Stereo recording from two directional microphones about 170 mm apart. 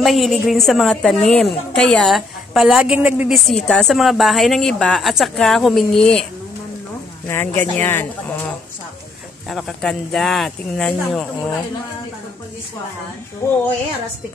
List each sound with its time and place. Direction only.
0.0 s a woman's voice: centre (ahead or behind)
7.2 s speech: 15° left (ahead or behind)
9.5 s a woman's voice: centre (ahead or behind)
13.4 s speech: 20° left (ahead or behind)